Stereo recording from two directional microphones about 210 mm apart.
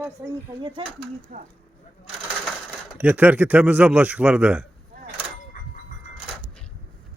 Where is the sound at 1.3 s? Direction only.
40° right (ahead or behind).